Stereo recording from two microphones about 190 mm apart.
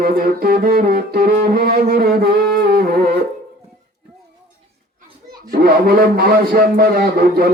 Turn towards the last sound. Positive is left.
turn(degrees=-50)  # may be behind; listen again after turning